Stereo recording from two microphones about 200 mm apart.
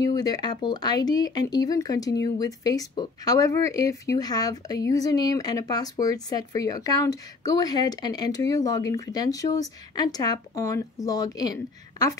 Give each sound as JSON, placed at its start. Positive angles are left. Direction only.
{"t": 0.0, "sound": "speech", "side_deg": 20}